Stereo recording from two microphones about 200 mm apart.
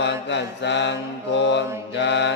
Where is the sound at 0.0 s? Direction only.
60° left (ahead or behind).